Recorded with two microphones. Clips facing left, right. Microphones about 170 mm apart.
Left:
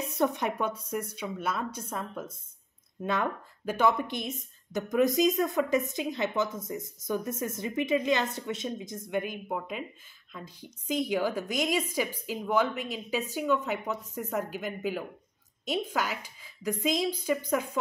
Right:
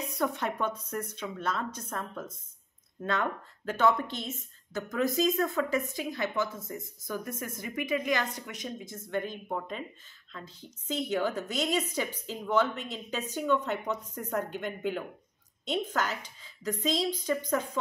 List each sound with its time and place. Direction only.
0.1 s a woman's voice: 20° left (ahead or behind)